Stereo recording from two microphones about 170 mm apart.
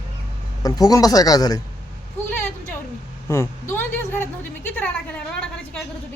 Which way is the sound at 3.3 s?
15° left (ahead or behind).